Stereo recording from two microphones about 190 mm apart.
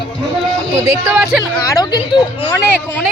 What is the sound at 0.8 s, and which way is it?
Speech, 15° right (ahead or behind).